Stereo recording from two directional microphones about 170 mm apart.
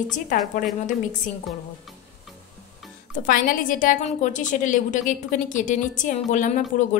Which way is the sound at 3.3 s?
55° left (ahead or behind).